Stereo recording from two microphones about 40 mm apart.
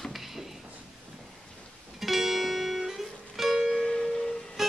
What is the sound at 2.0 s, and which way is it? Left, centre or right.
Music, centre.